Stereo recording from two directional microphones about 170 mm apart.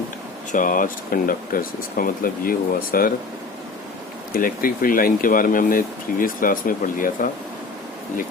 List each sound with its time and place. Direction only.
0.5 s speech: 50° left (ahead or behind)
4.4 s speech: 55° left (ahead or behind)